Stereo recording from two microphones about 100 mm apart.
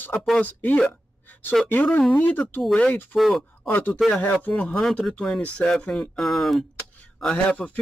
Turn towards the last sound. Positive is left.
turn(degrees=10)  # may be behind; listen again after turning